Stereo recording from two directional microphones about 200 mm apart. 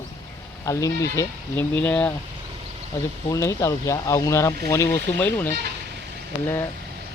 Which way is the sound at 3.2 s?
15° left (ahead or behind).